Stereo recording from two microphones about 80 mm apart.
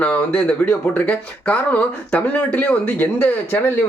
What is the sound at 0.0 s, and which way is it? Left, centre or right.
Speech, centre.